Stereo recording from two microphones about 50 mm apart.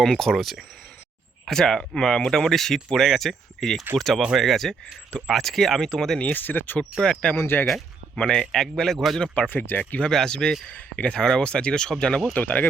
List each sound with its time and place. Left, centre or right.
0.0 s speech: centre
1.5 s speech: centre
6.3 s speech: left
7.0 s speech: centre
7.3 s speech: left
7.7 s a sound: centre
8.3 s speech: centre
9.5 s speech: left
10.1 s speech: centre
10.7 s speech: left
12.4 s speech: left